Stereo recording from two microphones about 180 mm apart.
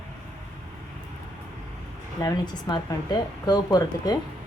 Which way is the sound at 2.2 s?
20° left (ahead or behind).